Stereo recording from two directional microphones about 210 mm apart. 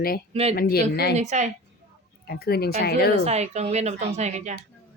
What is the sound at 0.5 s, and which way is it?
Speech, 45° left (ahead or behind).